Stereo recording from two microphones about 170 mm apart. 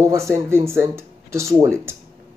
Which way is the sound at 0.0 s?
15° right (ahead or behind).